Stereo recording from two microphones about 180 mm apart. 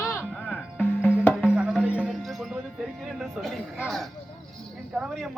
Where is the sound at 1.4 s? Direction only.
5° right (ahead or behind).